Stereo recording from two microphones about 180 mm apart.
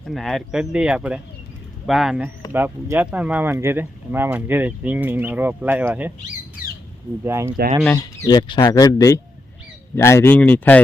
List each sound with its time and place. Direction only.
0.0 s speech: centre (ahead or behind)
7.3 s speech: 15° right (ahead or behind)
7.9 s speech: 25° left (ahead or behind)